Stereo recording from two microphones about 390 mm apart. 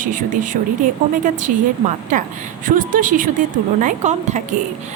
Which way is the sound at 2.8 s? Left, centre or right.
Right.